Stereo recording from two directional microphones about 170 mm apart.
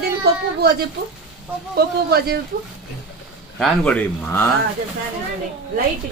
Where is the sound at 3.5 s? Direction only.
5° left (ahead or behind).